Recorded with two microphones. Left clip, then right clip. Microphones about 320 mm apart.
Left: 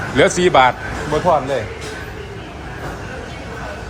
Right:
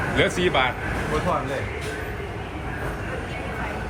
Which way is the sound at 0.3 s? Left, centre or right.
Centre.